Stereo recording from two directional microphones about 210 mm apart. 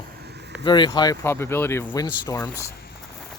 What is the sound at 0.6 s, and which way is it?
Speech, 20° left (ahead or behind).